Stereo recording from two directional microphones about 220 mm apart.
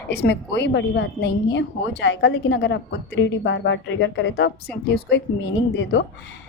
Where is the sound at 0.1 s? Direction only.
50° left (ahead or behind).